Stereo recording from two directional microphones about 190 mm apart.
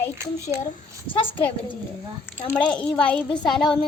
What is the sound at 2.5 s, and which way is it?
Speech, 5° left (ahead or behind).